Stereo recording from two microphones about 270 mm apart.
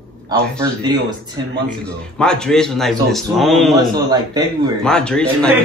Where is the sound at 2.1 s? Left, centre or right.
Centre.